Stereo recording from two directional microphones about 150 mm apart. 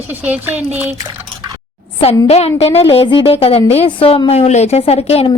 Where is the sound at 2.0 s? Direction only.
40° left (ahead or behind).